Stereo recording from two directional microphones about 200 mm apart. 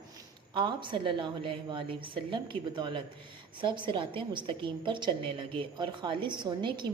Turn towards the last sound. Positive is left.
turn(degrees=-20)  # may be behind; listen again after turning